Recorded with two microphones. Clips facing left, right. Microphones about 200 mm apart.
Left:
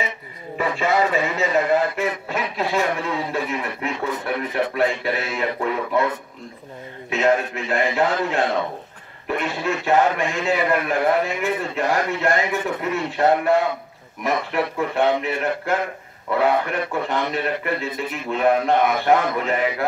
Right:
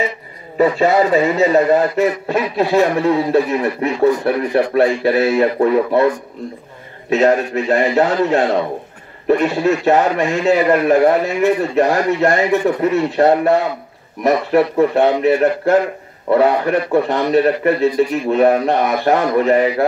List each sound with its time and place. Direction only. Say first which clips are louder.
0.6 s a man's voice: right 8 dB; 40° right (ahead or behind)